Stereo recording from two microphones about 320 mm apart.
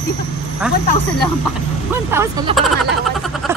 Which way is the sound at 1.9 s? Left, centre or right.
Centre.